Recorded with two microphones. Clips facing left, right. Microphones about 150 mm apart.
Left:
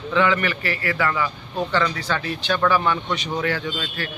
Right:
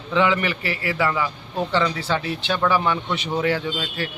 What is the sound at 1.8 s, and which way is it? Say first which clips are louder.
A man's voice: right 1 dB; 25° right (ahead or behind).